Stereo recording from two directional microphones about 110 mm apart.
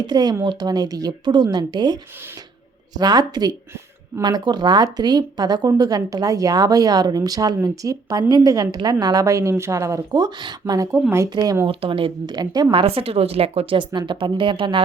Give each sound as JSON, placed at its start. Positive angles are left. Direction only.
{"t": 0.0, "sound": "speech", "side_deg": -40}
{"t": 11.6, "sound": "speech", "side_deg": -55}
{"t": 12.3, "sound": "speech", "side_deg": -40}
{"t": 12.7, "sound": "speech", "side_deg": -60}
{"t": 14.1, "sound": "speech", "side_deg": -45}